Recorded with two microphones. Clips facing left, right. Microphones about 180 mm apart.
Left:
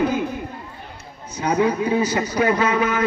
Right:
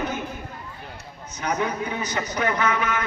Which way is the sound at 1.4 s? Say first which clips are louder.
Left 7 dB; 30° left (ahead or behind).